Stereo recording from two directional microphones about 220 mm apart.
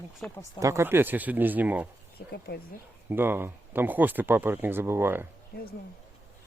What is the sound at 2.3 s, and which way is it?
Speech, 45° left (ahead or behind).